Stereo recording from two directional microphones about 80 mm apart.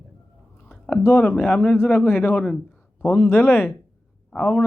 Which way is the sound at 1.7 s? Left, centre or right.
Left.